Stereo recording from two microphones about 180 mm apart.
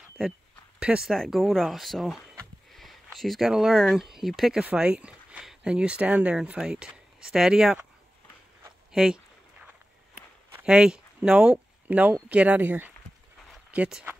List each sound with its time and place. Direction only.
0.7 s speech: 5° right (ahead or behind)
8.9 s speech: 5° right (ahead or behind)
10.5 s speech: 5° right (ahead or behind)